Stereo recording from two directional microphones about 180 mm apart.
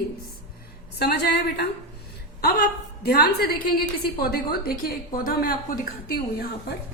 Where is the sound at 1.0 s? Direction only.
65° left (ahead or behind).